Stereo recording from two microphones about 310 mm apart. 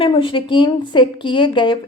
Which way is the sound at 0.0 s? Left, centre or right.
Centre.